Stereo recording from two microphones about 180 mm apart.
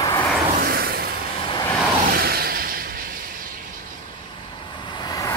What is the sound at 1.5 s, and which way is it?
Vehicle, 20° left (ahead or behind).